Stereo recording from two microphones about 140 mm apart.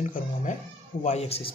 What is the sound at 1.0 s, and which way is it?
Speech, 45° left (ahead or behind).